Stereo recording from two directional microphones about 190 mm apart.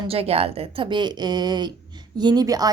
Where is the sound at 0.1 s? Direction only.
30° right (ahead or behind).